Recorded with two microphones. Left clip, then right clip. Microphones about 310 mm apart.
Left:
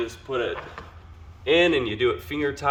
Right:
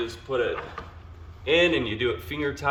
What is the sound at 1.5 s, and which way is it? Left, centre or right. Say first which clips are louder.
Speech: left 2 dB; centre.